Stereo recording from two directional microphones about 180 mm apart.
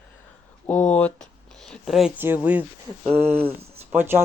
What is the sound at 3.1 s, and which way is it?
Speech, 35° right (ahead or behind).